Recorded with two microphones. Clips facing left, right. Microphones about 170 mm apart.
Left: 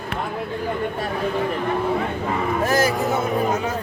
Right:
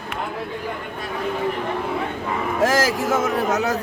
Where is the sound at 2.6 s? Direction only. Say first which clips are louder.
Right 2 dB; 90° right.